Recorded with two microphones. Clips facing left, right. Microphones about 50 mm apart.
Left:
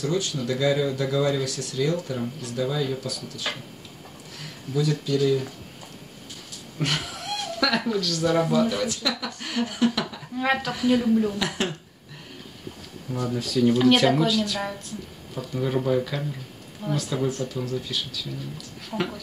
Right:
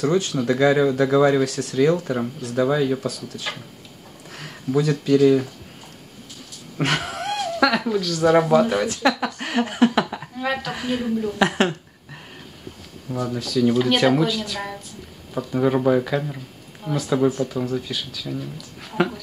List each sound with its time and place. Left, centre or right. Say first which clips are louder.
0.0 s speech: right 6 dB; right
6.8 s cat: right 5 dB; right
7.6 s speech: right 4 dB; right
10.4 s a sound: left 1 dB; centre
11.3 s speech: right 8 dB; right
13.1 s speech: right 2 dB; right
13.4 s speech: even; centre
15.6 s speech: right 5 dB; right
16.8 s speech: right 6 dB; centre